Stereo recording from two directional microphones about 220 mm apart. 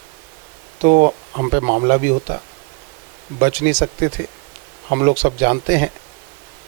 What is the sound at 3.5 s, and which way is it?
Speech, 10° right (ahead or behind).